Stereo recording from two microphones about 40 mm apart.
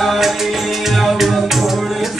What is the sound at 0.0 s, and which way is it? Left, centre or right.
Music, centre.